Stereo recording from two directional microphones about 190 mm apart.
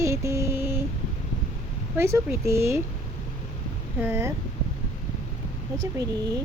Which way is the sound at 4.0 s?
10° right (ahead or behind).